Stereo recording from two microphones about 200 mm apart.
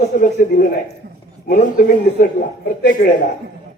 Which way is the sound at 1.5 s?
45° left (ahead or behind).